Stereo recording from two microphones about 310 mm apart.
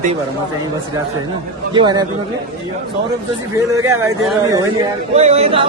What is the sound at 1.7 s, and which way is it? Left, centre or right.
Speech, centre.